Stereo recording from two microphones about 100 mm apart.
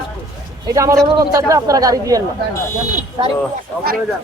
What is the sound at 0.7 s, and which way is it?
Speech, 35° right (ahead or behind).